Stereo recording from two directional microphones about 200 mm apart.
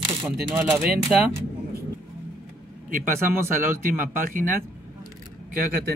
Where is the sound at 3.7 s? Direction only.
45° right (ahead or behind).